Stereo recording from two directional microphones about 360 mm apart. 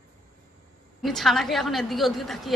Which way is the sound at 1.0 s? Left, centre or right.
Centre.